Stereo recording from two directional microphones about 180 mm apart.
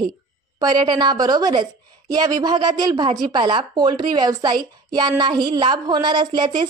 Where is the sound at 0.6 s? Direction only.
20° right (ahead or behind).